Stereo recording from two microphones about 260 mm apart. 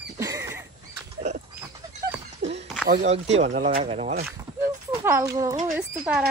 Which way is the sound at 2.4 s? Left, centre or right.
Right.